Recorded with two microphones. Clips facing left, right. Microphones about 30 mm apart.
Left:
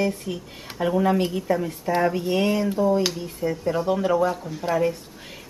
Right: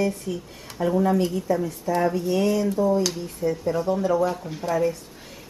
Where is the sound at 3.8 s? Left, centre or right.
Left.